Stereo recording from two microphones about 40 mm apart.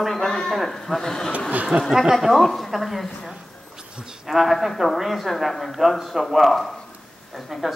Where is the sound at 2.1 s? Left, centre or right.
Centre.